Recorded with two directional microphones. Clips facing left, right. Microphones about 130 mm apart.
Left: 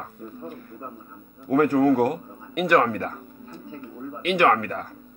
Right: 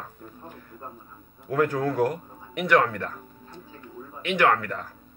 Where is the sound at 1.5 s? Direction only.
35° left (ahead or behind).